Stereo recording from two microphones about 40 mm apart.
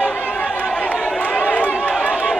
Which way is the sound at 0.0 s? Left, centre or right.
Left.